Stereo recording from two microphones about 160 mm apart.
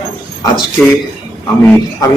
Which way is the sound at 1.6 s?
15° left (ahead or behind).